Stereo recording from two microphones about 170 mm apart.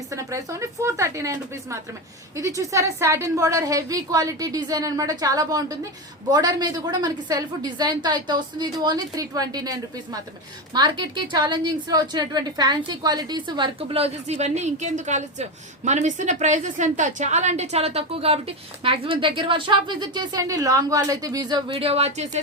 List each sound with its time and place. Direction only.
0.1 s a woman's voice: 20° right (ahead or behind); by 22.4 s 40° right (ahead or behind)